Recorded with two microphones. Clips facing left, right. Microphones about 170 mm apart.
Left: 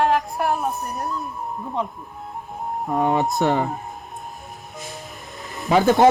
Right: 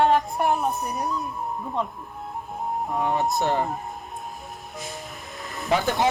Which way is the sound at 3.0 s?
80° left.